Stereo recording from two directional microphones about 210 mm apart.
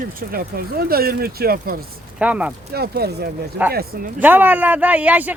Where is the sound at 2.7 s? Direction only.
50° right (ahead or behind).